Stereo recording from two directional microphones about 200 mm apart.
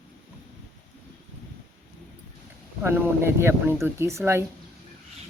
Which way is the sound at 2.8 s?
10° right (ahead or behind).